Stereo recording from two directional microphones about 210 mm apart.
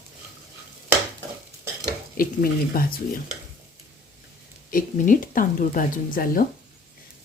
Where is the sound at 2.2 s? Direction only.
45° left (ahead or behind).